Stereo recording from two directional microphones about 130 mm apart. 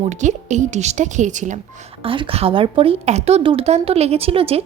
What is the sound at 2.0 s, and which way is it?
Speech, 45° right (ahead or behind).